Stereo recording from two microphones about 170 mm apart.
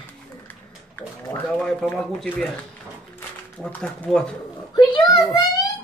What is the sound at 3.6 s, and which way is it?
Speech, 5° left (ahead or behind).